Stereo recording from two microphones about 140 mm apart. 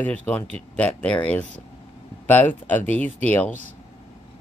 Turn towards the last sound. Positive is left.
turn(degrees=10)  # may be behind; listen again after turning